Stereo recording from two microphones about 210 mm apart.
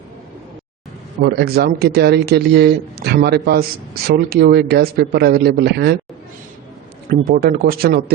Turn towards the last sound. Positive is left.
turn(degrees=-45)  # may be behind; listen again after turning